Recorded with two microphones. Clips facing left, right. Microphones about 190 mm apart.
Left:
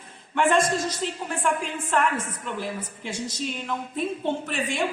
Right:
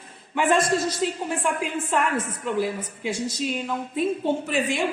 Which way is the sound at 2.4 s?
10° right (ahead or behind).